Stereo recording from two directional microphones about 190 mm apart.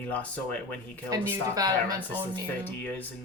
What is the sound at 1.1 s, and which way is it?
Speech, 20° right (ahead or behind).